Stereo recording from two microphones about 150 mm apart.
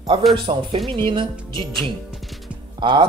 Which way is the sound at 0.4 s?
35° right (ahead or behind).